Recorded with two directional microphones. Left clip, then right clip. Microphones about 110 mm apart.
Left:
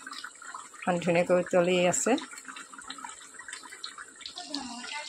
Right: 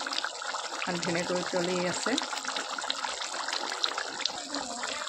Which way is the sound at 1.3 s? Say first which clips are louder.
Left 6 dB; 45° left (ahead or behind).